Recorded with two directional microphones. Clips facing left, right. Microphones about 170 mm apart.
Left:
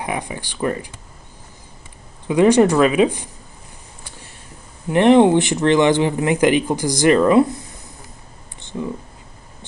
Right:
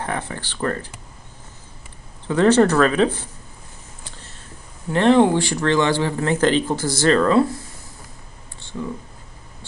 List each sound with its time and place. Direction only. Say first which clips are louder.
0.0 s speech: left 1 dB; 10° left (ahead or behind)
2.2 s speech: left 2 dB; 15° left (ahead or behind)
4.8 s speech: left 3 dB; 15° left (ahead or behind)
8.5 s clicking: left 3 dB; 20° left (ahead or behind)